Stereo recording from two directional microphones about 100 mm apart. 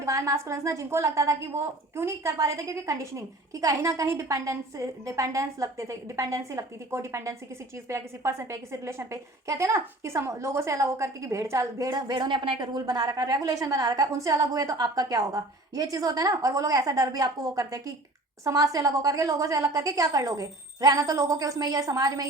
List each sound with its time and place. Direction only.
0.0 s a woman's voice: 30° right (ahead or behind)